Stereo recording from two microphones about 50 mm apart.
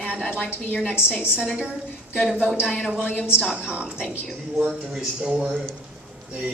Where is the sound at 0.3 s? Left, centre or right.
Left.